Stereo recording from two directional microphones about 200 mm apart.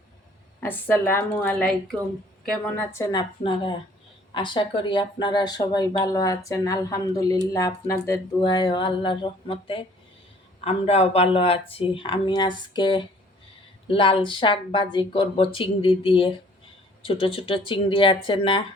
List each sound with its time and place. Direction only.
0.6 s a woman's voice: 10° left (ahead or behind)
2.9 s speech: 15° left (ahead or behind)